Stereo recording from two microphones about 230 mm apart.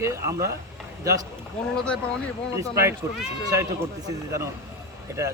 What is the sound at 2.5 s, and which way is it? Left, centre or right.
A man's voice, centre.